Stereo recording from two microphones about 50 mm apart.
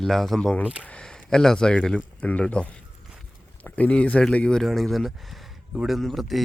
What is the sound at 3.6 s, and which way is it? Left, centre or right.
Speech, left.